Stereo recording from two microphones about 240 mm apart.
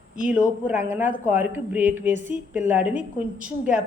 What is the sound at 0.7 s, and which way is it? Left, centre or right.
A woman's voice, centre.